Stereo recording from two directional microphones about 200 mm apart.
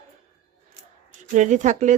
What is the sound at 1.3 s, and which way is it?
Speech, 40° right (ahead or behind).